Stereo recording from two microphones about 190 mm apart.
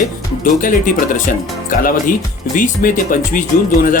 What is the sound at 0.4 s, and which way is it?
Speech, 45° left (ahead or behind).